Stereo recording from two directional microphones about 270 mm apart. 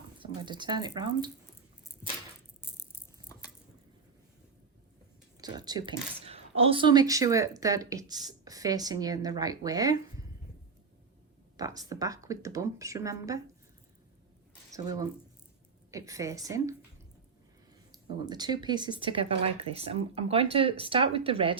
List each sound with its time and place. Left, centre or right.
0.2 s speech: centre
5.4 s speech: centre
11.5 s speech: centre
14.7 s speech: centre
17.9 s speech: centre